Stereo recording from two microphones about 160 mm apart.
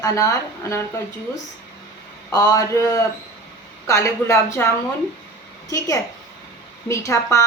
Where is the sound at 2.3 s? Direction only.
20° left (ahead or behind).